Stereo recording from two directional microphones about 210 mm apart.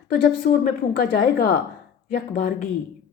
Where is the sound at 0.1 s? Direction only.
40° left (ahead or behind).